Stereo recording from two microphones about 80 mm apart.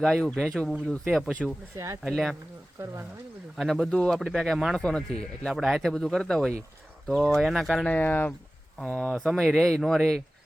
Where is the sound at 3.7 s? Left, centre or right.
Centre.